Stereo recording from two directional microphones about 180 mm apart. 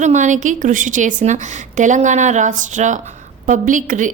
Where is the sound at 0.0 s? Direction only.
40° right (ahead or behind).